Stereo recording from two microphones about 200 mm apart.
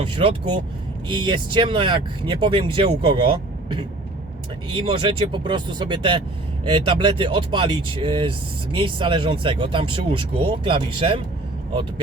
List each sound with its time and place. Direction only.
0.0 s speech: 25° right (ahead or behind)